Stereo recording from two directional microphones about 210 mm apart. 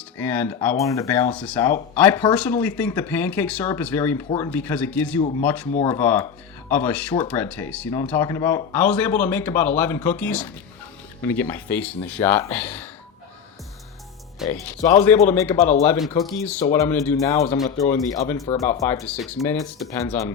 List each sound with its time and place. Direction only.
0.2 s speech: 10° left (ahead or behind)
14.4 s speech: 15° left (ahead or behind)